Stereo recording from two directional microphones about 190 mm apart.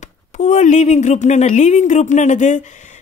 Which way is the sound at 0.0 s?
40° left (ahead or behind).